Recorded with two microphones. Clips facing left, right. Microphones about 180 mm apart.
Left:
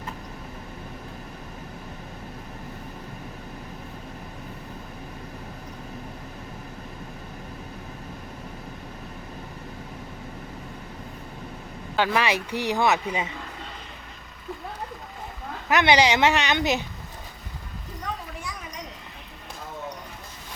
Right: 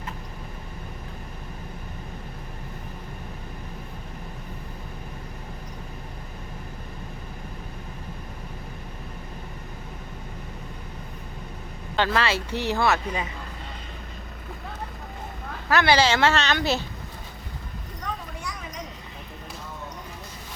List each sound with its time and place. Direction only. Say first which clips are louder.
11.9 s speech: left 1 dB; 15° left (ahead or behind)
15.7 s speech: left 1 dB; 20° left (ahead or behind)